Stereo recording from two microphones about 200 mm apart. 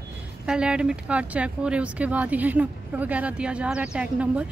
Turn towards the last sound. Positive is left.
turn(degrees=-5)  # may be behind; listen again after turning